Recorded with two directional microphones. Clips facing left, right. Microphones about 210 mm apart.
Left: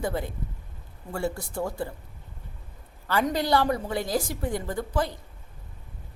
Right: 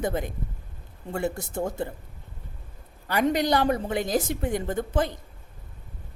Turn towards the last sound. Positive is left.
turn(degrees=-20)  # may be behind; listen again after turning